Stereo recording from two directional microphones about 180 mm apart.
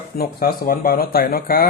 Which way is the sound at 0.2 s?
55° left (ahead or behind).